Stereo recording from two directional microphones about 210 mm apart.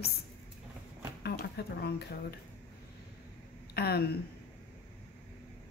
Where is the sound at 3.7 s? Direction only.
50° left (ahead or behind).